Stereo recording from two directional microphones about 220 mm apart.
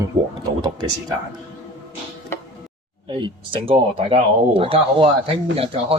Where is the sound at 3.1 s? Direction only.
20° right (ahead or behind).